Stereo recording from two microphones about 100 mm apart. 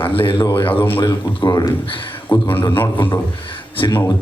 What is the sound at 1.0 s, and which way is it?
Speech, 40° left (ahead or behind).